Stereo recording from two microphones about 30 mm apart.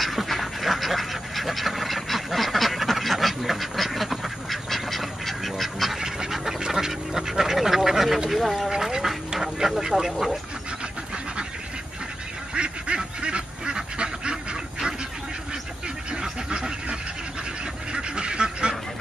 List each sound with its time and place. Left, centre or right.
0.0 s duck: centre
5.9 s pant: centre
6.6 s duck: centre
8.3 s speech: centre
8.6 s duck: centre
9.7 s speech: centre
12.5 s duck: right
16.1 s duck: right
17.9 s duck: right